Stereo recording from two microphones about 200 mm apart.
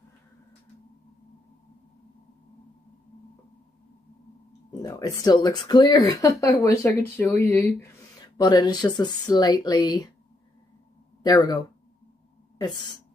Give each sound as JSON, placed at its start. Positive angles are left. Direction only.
{"t": 4.8, "sound": "speech", "side_deg": 15}
{"t": 11.2, "sound": "speech", "side_deg": 20}